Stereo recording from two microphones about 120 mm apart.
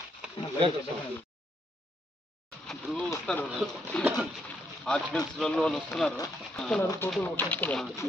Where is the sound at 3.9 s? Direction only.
10° left (ahead or behind).